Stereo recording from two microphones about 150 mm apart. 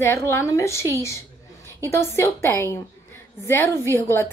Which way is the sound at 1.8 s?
20° left (ahead or behind).